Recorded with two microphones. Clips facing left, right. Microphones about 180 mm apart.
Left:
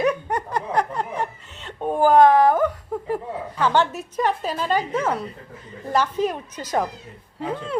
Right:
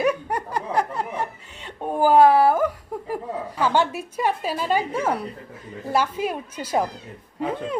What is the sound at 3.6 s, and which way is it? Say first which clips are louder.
A woman's voice: left 1 dB; 10° right (ahead or behind).